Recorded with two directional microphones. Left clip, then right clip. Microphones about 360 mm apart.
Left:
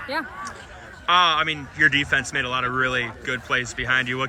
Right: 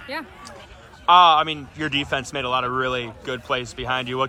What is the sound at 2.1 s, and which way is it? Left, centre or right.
Speech, centre.